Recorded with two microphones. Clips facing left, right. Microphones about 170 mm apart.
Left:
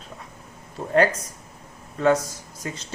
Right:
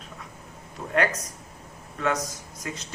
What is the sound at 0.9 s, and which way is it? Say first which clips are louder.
Speech: left 5 dB; 30° left (ahead or behind).